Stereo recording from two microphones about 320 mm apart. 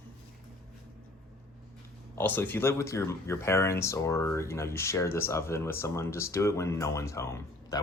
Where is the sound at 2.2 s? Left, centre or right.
Centre.